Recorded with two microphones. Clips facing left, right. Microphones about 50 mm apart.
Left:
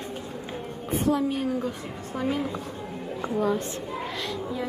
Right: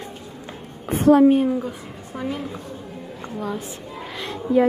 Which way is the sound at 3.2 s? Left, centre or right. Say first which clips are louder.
Left 4 dB; centre.